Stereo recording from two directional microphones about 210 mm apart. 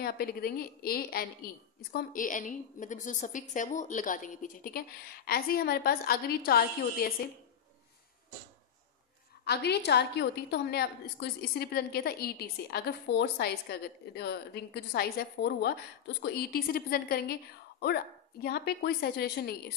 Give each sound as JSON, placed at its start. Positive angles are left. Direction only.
{"t": 0.0, "sound": "a woman's voice", "side_deg": 45}
{"t": 9.4, "sound": "a woman's voice", "side_deg": 50}